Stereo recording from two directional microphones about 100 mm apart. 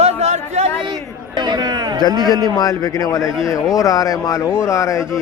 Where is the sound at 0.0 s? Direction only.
90° right.